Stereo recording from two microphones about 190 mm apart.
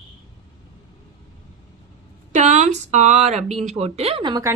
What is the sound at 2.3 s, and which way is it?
Speech, 40° right (ahead or behind).